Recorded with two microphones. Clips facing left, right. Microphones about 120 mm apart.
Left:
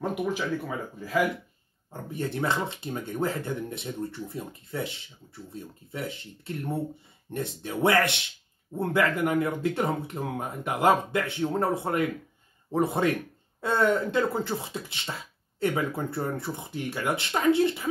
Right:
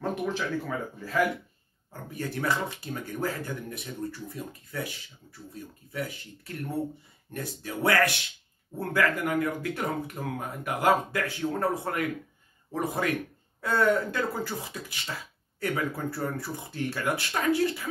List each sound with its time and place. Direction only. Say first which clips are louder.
0.0 s speech: left 1 dB; 10° left (ahead or behind)
1.9 s speech: left 3 dB; 25° left (ahead or behind)